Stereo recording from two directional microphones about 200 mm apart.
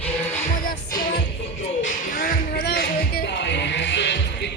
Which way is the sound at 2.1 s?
45° left (ahead or behind).